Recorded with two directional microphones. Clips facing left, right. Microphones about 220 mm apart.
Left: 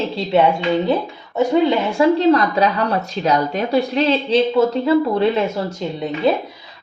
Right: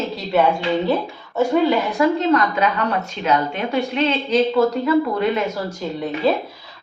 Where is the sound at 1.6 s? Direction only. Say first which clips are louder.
Left 2 dB; 30° left (ahead or behind).